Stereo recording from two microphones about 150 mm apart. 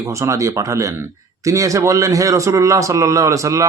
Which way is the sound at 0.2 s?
20° right (ahead or behind).